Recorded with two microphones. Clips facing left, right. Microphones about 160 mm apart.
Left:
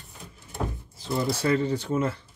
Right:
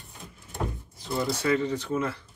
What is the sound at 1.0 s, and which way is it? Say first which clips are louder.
Speech: left 2 dB; 30° left (ahead or behind).